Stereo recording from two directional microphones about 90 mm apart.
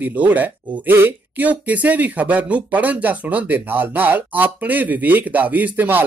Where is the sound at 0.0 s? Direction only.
20° right (ahead or behind).